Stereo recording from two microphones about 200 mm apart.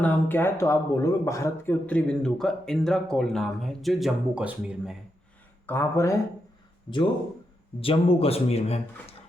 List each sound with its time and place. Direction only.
0.0 s speech: 10° left (ahead or behind)
5.6 s speech: 10° left (ahead or behind)
7.8 s speech: 30° left (ahead or behind)